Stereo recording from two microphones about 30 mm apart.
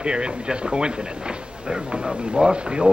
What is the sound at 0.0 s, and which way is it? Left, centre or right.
Speech, right.